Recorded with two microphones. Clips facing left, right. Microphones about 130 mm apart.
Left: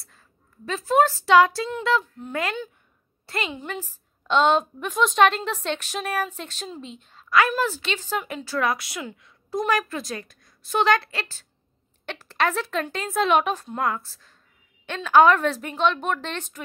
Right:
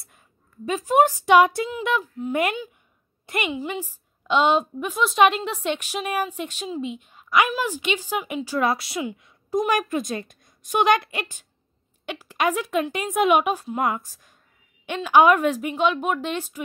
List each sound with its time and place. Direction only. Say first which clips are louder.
0.7 s a woman's voice: right 1 dB; 15° right (ahead or behind)
3.3 s a woman's voice: right 3 dB; 15° right (ahead or behind)
8.6 s speech: right 2 dB; 25° right (ahead or behind)
9.0 s a woman's voice: right 6 dB; 15° right (ahead or behind)